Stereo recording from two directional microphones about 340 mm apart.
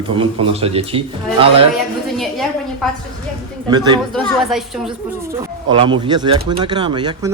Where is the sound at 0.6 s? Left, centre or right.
Centre.